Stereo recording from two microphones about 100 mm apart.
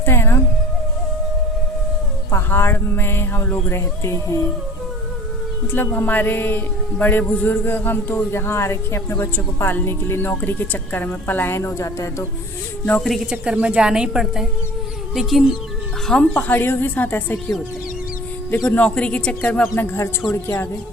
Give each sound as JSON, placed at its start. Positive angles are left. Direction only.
{"t": 0.0, "sound": "music", "side_deg": 25}
{"t": 2.3, "sound": "a man's voice", "side_deg": 25}
{"t": 5.7, "sound": "a man's voice", "side_deg": 20}
{"t": 13.3, "sound": "a woman's voice", "side_deg": -10}
{"t": 16.3, "sound": "a man's voice", "side_deg": 20}
{"t": 18.5, "sound": "speech", "side_deg": 15}
{"t": 19.7, "sound": "a man's voice", "side_deg": 25}